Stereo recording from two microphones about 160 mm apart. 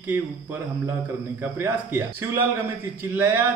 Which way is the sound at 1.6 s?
15° right (ahead or behind).